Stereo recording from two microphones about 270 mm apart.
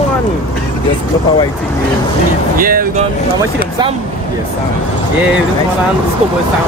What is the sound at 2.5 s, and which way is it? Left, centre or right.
Speech, right.